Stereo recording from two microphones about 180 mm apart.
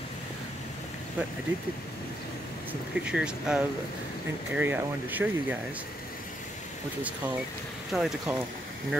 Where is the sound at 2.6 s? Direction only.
5° right (ahead or behind).